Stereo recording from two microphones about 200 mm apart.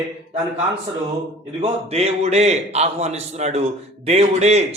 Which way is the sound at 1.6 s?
30° right (ahead or behind).